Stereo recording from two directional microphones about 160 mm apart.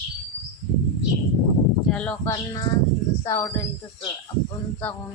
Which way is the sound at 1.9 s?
10° left (ahead or behind).